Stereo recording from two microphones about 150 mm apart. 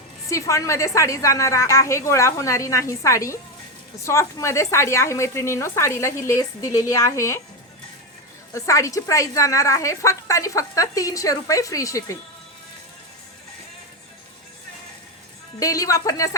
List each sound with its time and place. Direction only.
0.3 s a woman's voice: 20° left (ahead or behind)
8.5 s a woman's voice: 20° left (ahead or behind)
15.5 s a woman's voice: 25° left (ahead or behind)